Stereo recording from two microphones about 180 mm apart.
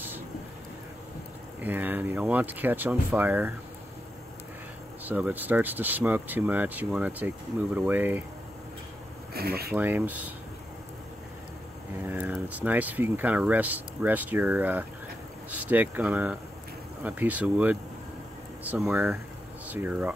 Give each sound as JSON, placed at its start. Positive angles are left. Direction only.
{"t": 1.6, "sound": "speech", "side_deg": -10}
{"t": 5.0, "sound": "speech", "side_deg": -10}
{"t": 9.3, "sound": "speech", "side_deg": -60}
{"t": 9.8, "sound": "speech", "side_deg": -10}
{"t": 12.0, "sound": "speech", "side_deg": -10}